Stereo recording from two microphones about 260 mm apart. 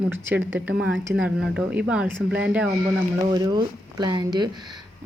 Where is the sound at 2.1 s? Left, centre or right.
Right.